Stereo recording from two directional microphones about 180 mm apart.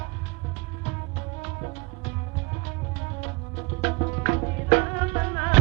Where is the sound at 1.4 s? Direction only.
40° left (ahead or behind).